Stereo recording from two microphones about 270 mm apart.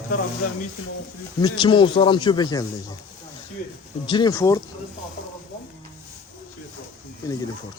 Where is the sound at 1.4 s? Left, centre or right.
Centre.